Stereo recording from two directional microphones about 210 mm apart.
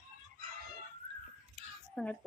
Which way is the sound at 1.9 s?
5° left (ahead or behind).